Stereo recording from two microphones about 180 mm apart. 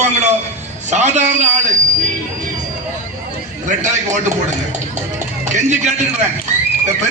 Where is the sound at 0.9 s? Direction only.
40° right (ahead or behind).